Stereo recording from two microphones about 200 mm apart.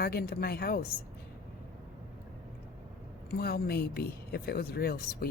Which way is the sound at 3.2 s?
50° left (ahead or behind).